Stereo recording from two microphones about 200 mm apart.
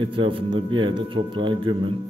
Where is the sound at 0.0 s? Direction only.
25° right (ahead or behind).